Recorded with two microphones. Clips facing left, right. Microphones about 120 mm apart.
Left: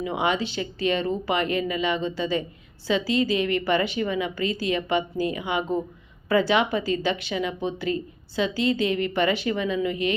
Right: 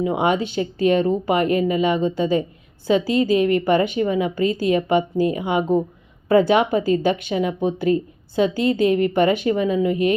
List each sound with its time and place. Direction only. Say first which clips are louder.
0.0 s speech: right 5 dB; 45° right (ahead or behind)